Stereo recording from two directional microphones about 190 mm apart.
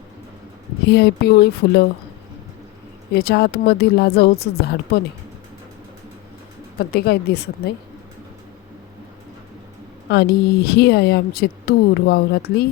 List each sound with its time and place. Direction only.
0.9 s speech: 60° left (ahead or behind)
3.2 s speech: 55° left (ahead or behind)
6.7 s speech: 55° left (ahead or behind)
10.1 s speech: 55° left (ahead or behind)